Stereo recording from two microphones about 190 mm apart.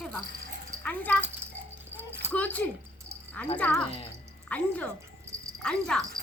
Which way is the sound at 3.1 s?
15° right (ahead or behind).